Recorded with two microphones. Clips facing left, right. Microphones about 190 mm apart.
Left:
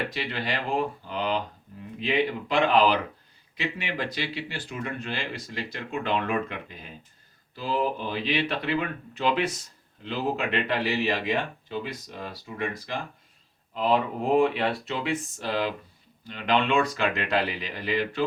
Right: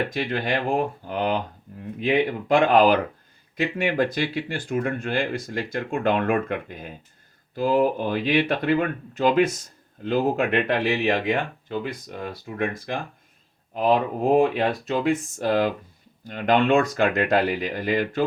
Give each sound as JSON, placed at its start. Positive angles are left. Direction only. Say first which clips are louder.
{"t": 0.1, "sound": "speech", "louder": "right 6 dB", "side_deg": -45}